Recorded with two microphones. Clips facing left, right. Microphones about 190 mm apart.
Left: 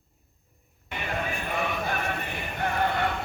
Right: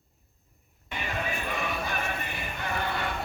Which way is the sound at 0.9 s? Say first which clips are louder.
Left 2 dB; 55° left (ahead or behind).